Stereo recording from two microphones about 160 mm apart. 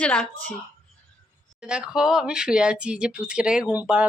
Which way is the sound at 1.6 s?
5° right (ahead or behind).